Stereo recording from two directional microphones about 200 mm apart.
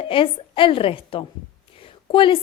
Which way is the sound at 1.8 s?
25° left (ahead or behind).